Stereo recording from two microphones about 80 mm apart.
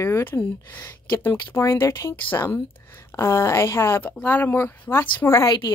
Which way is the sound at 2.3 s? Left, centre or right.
Left.